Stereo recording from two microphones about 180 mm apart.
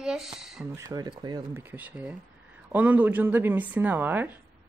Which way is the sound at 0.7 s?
20° right (ahead or behind).